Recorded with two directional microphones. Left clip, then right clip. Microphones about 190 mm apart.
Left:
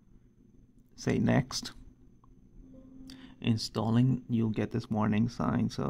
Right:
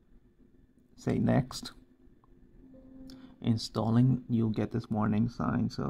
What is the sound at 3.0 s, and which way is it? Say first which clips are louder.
Speech: left 1 dB; 10° left (ahead or behind).